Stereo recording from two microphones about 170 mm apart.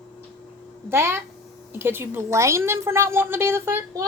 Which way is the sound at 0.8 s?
15° right (ahead or behind).